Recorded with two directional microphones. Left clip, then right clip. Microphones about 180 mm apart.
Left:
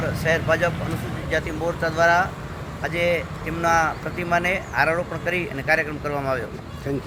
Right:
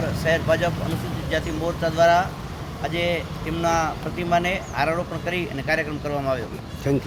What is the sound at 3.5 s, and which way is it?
Speech, centre (ahead or behind).